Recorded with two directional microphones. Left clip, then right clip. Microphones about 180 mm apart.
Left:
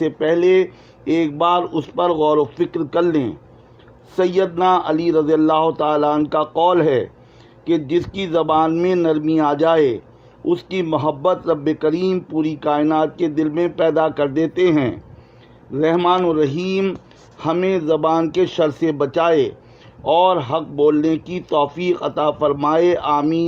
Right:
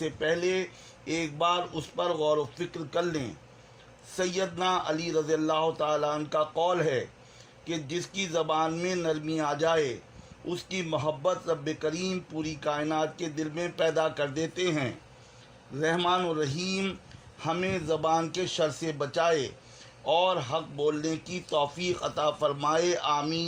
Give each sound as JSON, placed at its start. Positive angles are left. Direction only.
{"t": 0.0, "sound": "a man's voice", "side_deg": 55}